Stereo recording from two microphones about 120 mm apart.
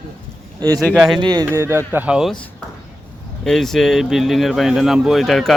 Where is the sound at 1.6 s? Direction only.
20° right (ahead or behind).